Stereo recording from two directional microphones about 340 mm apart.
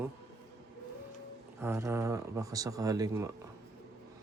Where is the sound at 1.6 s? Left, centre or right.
Centre.